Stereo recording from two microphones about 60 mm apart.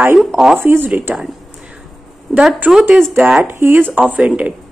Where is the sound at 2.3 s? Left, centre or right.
Centre.